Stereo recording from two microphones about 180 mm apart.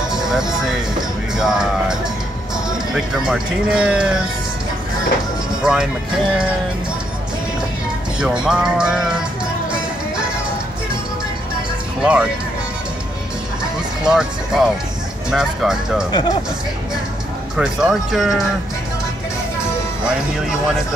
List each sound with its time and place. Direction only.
0.1 s speech: 5° right (ahead or behind)
5.6 s speech: 5° right (ahead or behind)
8.2 s speech: 5° right (ahead or behind)
12.0 s speech: 5° right (ahead or behind)
14.0 s speech: 5° right (ahead or behind)
16.1 s speech: 25° left (ahead or behind)
17.6 s speech: 5° right (ahead or behind)
20.3 s speech: 5° right (ahead or behind)